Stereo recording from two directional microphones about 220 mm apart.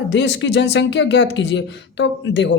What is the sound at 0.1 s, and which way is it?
Speech, 50° left (ahead or behind).